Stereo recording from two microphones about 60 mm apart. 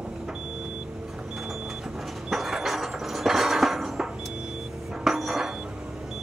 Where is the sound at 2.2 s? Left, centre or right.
Centre.